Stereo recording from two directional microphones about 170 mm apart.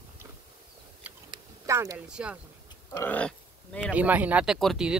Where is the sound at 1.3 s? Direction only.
20° right (ahead or behind).